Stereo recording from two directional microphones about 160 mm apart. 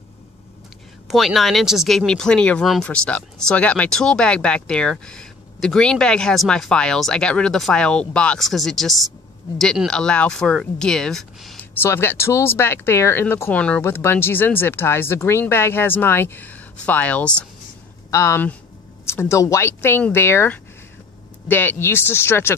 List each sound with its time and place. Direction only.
1.0 s speech: centre (ahead or behind)
11.7 s speech: 15° left (ahead or behind)
18.1 s speech: 15° left (ahead or behind)